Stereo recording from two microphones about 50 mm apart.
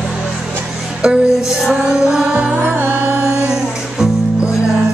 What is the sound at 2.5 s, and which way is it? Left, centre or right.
Music, right.